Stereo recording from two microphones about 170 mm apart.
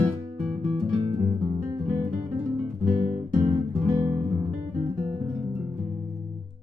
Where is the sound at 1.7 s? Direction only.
20° right (ahead or behind).